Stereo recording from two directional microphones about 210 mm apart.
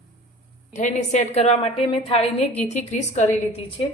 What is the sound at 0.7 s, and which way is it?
A woman's voice, 35° left (ahead or behind).